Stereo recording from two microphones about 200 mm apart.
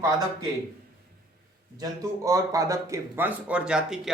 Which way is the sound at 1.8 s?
15° right (ahead or behind).